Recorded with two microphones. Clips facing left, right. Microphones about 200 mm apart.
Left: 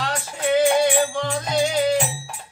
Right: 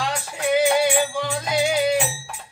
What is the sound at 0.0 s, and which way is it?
Music, 10° right (ahead or behind).